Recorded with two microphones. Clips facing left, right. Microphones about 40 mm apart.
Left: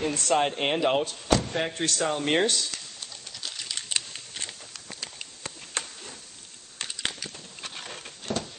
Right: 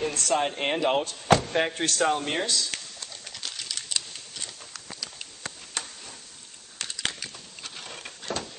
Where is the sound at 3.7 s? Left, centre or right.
Left.